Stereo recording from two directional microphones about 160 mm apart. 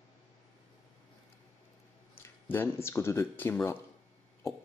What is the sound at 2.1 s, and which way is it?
Speech, 15° left (ahead or behind).